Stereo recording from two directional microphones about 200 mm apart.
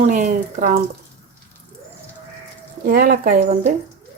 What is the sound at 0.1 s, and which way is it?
Speech, 40° right (ahead or behind).